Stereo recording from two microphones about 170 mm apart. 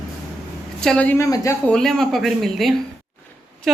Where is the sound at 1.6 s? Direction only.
5° left (ahead or behind).